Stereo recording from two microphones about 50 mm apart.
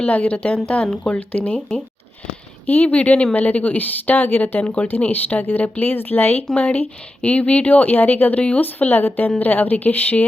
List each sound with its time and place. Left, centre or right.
0.0 s a woman's voice: left
4.6 s a woman's voice: left
6.5 s speech: left